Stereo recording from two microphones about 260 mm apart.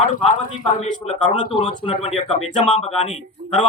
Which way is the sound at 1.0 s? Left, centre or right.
Centre.